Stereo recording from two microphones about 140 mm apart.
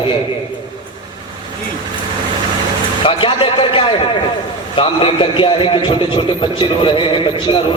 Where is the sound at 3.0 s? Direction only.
40° left (ahead or behind).